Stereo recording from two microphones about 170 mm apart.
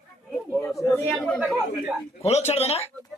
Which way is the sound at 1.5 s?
10° right (ahead or behind).